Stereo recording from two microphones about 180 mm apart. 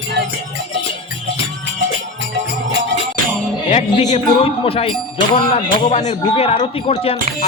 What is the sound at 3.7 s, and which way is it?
Speech, 40° left (ahead or behind).